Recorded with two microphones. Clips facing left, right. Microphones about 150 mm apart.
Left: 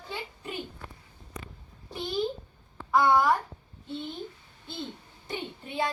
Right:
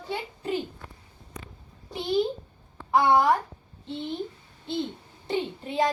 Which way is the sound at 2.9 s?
25° right (ahead or behind).